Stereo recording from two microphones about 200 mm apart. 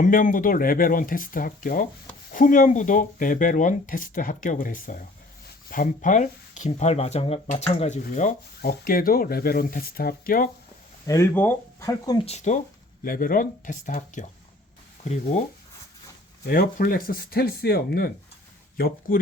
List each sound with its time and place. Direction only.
0.0 s speech: 40° left (ahead or behind)
11.0 s speech: 15° left (ahead or behind)
12.2 s speech: 35° left (ahead or behind)
13.1 s speech: 45° left (ahead or behind)
16.5 s speech: 45° left (ahead or behind)